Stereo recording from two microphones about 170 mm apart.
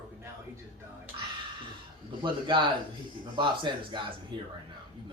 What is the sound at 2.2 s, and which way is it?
Speech, 25° right (ahead or behind).